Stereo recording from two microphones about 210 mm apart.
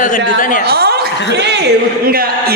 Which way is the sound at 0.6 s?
50° right (ahead or behind).